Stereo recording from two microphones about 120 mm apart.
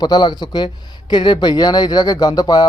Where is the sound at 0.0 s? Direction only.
35° left (ahead or behind).